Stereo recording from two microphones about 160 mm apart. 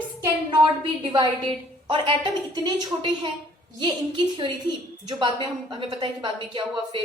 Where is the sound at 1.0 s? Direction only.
30° right (ahead or behind).